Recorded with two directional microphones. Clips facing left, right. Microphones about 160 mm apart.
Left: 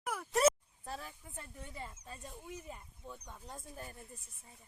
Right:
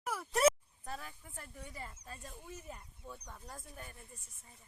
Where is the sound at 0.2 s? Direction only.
Centre (ahead or behind).